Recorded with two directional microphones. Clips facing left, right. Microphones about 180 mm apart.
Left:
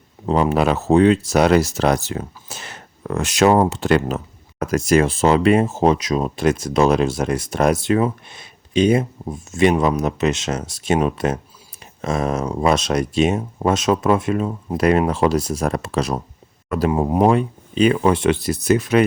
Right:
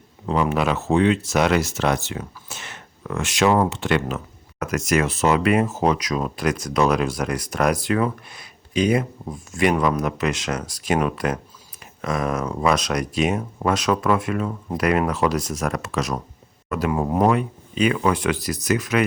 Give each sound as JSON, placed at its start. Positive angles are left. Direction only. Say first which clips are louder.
{"t": 0.3, "sound": "speech", "louder": "left 4 dB", "side_deg": 35}
{"t": 16.9, "sound": "speech", "louder": "left 3 dB", "side_deg": 25}